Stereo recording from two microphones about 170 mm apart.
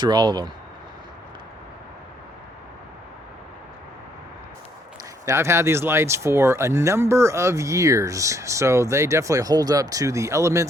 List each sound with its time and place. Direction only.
0.0 s speech: 25° right (ahead or behind)
5.2 s speech: 15° right (ahead or behind)